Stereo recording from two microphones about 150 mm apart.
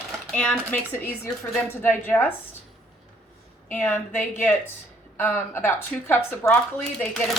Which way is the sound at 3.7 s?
15° left (ahead or behind).